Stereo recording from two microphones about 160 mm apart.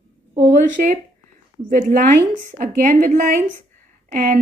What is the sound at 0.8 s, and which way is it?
A woman's voice, 60° right (ahead or behind).